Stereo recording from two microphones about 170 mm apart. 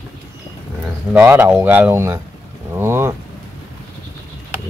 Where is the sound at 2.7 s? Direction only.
15° right (ahead or behind).